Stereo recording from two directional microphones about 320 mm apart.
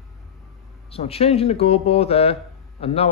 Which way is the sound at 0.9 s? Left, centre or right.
Centre.